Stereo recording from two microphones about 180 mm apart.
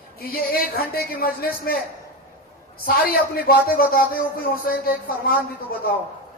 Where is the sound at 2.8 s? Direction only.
55° left (ahead or behind).